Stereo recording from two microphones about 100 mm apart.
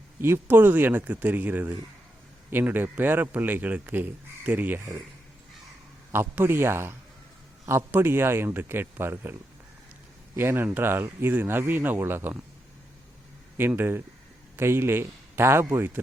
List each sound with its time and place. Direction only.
0.2 s speech: 25° right (ahead or behind)
6.1 s speech: 25° right (ahead or behind)
10.3 s speech: 25° right (ahead or behind)
13.6 s a man's voice: 20° right (ahead or behind)